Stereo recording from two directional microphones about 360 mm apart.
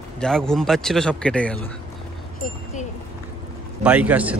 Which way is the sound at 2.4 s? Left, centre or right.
Left.